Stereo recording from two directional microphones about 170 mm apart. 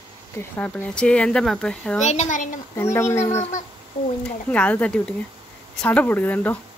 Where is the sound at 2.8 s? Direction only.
15° left (ahead or behind).